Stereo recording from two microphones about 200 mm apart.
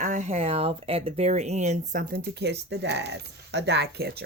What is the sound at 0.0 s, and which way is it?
Speech, 35° right (ahead or behind).